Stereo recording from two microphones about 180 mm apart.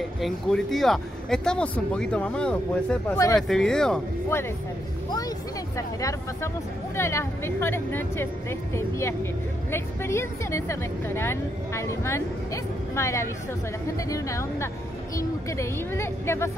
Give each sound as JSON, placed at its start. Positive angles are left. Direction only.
{"t": 0.2, "sound": "speech", "side_deg": 0}
{"t": 4.3, "sound": "speech", "side_deg": 15}
{"t": 5.8, "sound": "speech", "side_deg": 20}